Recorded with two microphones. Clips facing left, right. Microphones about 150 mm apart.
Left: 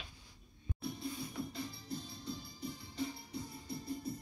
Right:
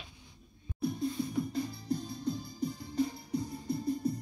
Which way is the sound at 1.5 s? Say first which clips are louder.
Right 9 dB; 45° right (ahead or behind).